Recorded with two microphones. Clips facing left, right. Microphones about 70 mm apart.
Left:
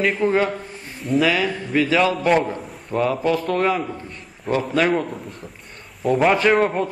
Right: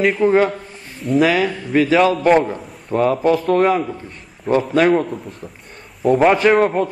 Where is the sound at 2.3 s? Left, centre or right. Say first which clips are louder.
Right 4 dB; centre.